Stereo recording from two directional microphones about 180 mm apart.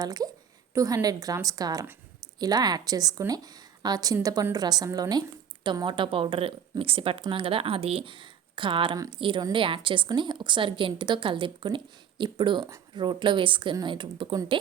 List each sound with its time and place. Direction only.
0.0 s speech: 20° right (ahead or behind)